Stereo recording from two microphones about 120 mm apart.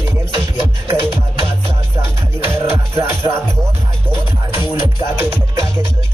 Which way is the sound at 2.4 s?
20° right (ahead or behind).